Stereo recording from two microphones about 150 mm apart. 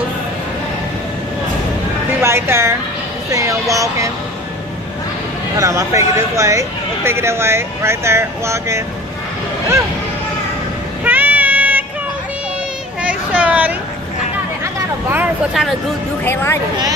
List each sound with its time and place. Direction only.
2.2 s a woman's voice: 15° right (ahead or behind)
5.6 s speech: 20° right (ahead or behind)
11.1 s a sound: 10° right (ahead or behind)
13.0 s a sound: 10° right (ahead or behind)
14.6 s vehicle: 15° right (ahead or behind)
16.3 s speech: 15° left (ahead or behind)